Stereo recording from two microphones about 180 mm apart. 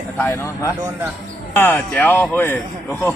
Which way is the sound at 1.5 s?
10° left (ahead or behind).